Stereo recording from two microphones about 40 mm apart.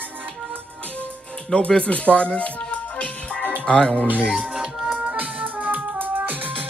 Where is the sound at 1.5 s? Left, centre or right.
Left.